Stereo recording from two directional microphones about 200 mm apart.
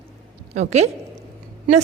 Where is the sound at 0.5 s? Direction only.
35° right (ahead or behind).